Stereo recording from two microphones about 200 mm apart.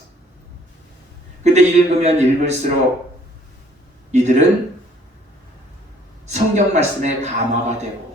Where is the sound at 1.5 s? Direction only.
35° right (ahead or behind).